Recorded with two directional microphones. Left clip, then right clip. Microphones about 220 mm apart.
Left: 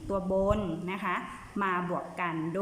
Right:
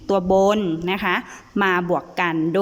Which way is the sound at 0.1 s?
45° right (ahead or behind).